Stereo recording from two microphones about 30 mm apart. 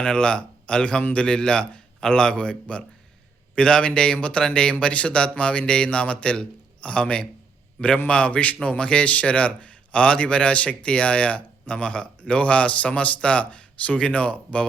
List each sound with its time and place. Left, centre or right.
0.0 s a man's voice: left